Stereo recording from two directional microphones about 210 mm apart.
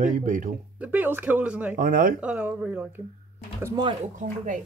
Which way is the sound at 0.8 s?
10° right (ahead or behind).